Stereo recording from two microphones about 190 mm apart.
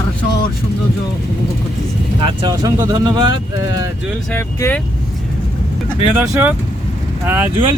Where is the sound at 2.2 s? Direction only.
25° right (ahead or behind).